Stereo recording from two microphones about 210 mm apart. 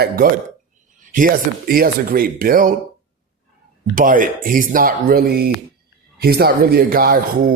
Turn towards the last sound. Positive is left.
turn(degrees=-45)  # may be behind; listen again after turning